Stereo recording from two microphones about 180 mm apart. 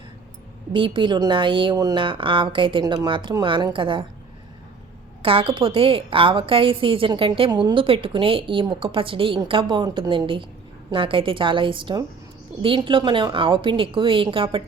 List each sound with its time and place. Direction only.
0.7 s a woman's voice: 25° right (ahead or behind)
5.2 s a woman's voice: 30° right (ahead or behind)